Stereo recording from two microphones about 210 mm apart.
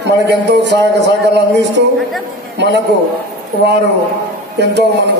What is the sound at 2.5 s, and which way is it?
Speech, 55° right (ahead or behind).